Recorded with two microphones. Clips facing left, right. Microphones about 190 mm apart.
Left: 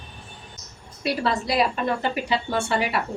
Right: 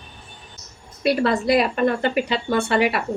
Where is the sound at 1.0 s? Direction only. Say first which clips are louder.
Right 6 dB; 55° right (ahead or behind).